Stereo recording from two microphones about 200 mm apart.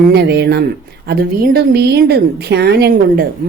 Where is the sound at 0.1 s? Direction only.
55° right (ahead or behind).